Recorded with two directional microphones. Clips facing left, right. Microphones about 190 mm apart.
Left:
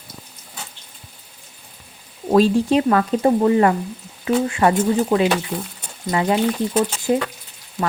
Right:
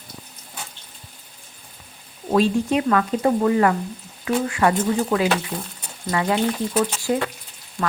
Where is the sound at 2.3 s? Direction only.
35° left (ahead or behind).